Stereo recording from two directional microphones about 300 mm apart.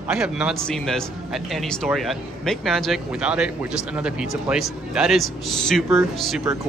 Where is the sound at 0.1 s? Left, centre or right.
Centre.